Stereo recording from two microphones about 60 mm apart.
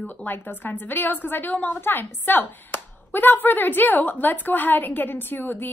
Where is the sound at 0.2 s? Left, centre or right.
Left.